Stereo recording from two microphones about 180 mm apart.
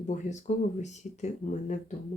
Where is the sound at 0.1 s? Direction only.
40° left (ahead or behind).